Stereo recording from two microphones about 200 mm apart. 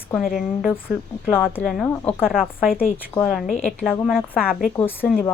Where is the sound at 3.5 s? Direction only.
35° left (ahead or behind).